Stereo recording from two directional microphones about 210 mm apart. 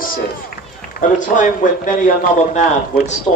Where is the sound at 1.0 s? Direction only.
40° left (ahead or behind).